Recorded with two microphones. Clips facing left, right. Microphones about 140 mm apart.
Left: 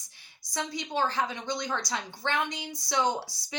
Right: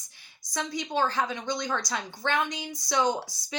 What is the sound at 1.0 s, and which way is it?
Speech, 25° left (ahead or behind).